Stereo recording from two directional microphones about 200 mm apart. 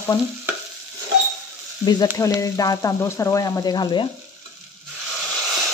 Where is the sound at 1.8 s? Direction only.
20° left (ahead or behind).